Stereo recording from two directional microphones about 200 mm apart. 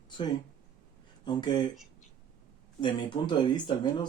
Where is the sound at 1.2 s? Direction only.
20° left (ahead or behind).